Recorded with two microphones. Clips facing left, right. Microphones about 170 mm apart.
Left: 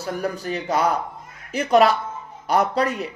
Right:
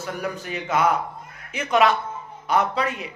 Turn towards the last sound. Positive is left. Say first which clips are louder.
# left 3 dB
turn(degrees=40)  # may be behind; listen again after turning